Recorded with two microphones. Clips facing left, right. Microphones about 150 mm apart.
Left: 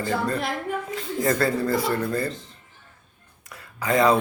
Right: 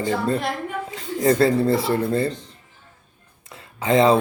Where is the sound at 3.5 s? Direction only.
25° right (ahead or behind).